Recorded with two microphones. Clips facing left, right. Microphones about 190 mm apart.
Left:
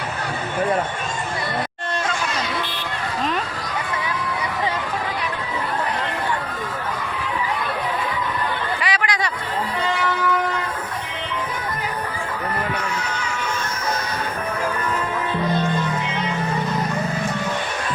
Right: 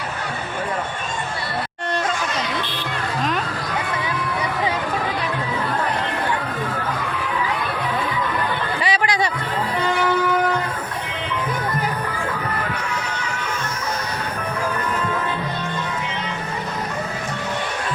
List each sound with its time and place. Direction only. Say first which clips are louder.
8.8 s chatter: right 5 dB; 30° right (ahead or behind)